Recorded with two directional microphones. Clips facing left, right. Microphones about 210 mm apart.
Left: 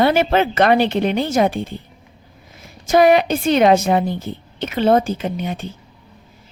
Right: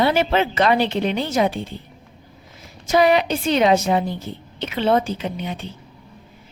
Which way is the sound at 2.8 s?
50° left (ahead or behind).